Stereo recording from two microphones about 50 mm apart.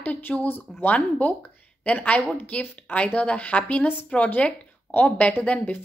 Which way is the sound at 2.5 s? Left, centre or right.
Left.